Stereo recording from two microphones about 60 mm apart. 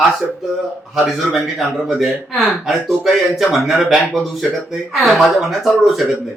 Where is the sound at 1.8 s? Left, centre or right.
Centre.